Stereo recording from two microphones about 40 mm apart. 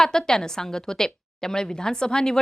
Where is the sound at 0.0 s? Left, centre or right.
Centre.